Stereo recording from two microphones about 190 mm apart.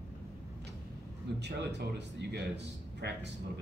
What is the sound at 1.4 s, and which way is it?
Speech, 60° right (ahead or behind).